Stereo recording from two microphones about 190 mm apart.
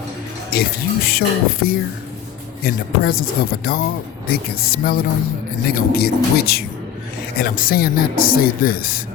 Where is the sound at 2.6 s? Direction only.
55° left (ahead or behind).